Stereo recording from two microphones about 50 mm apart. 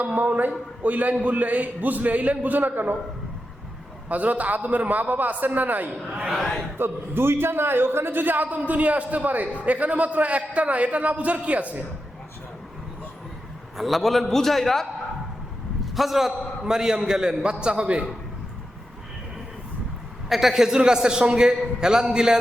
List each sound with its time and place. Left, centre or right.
0.0 s a man's voice: right
4.1 s a man's voice: right
6.1 s a man's voice: centre
6.7 s a man's voice: right
13.7 s a man's voice: centre
16.0 s a man's voice: centre; by 18.0 s right
20.3 s a man's voice: centre